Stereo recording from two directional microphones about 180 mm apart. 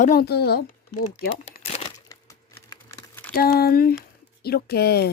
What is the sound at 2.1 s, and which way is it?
Crumpling, 20° left (ahead or behind).